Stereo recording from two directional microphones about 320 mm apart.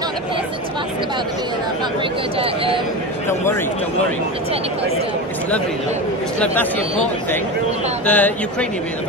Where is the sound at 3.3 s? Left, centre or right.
Centre.